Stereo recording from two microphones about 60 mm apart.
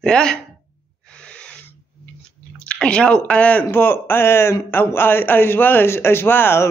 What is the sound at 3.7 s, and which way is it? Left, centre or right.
A man's voice, left.